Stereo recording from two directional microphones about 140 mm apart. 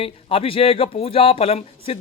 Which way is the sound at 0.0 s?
40° left (ahead or behind).